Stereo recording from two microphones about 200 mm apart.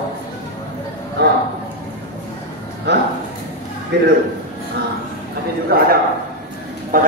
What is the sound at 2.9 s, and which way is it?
Speech, 60° right (ahead or behind).